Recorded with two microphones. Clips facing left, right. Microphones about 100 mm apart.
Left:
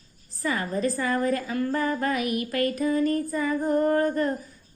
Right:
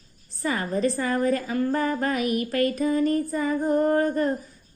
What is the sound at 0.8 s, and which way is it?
Speech, 30° right (ahead or behind).